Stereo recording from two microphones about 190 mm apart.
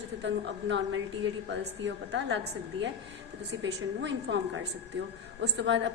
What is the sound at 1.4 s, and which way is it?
Speech, 65° right (ahead or behind).